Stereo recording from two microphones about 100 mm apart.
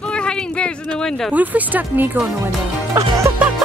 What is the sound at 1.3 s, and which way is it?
Speech, 15° right (ahead or behind).